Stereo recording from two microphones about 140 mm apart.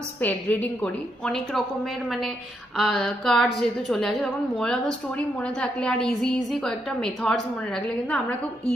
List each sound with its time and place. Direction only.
0.2 s a woman's voice: 10° left (ahead or behind)